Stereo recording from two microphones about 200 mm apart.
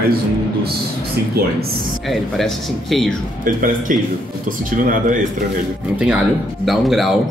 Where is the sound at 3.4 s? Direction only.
40° right (ahead or behind).